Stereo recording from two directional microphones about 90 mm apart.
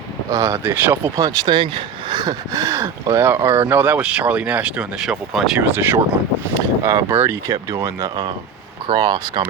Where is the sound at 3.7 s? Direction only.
20° right (ahead or behind).